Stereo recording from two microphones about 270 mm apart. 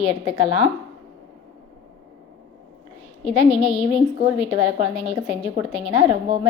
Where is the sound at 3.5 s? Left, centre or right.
Left.